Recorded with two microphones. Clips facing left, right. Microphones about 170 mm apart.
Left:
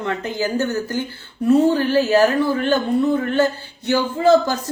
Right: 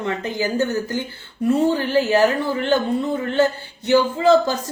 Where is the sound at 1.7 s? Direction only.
20° right (ahead or behind).